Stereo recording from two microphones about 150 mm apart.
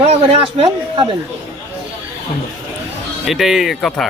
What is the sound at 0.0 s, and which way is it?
Speech, 45° right (ahead or behind).